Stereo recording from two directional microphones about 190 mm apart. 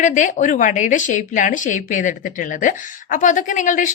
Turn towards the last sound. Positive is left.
turn(degrees=40)  # may be behind; listen again after turning